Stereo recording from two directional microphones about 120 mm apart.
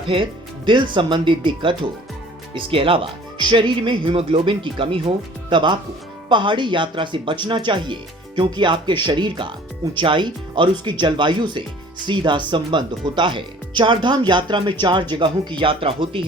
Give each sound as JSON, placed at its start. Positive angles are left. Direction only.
{"t": 0.1, "sound": "speech", "side_deg": -45}